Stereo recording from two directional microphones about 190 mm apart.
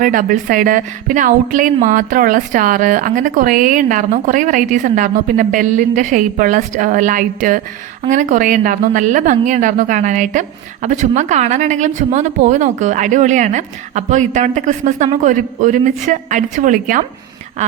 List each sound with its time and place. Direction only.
0.0 s speech: 45° right (ahead or behind)